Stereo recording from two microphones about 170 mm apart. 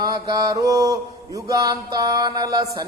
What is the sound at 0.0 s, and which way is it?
Speech, 25° right (ahead or behind).